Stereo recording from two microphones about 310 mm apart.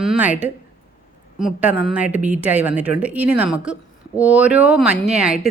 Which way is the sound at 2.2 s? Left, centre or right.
Right.